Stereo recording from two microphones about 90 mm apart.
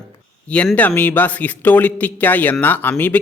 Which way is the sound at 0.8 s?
20° left (ahead or behind).